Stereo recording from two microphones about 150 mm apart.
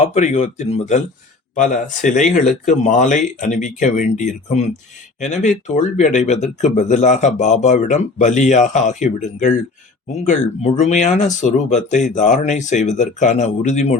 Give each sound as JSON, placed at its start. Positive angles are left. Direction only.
{"t": 0.0, "sound": "speech", "side_deg": 50}
{"t": 1.5, "sound": "speech", "side_deg": 60}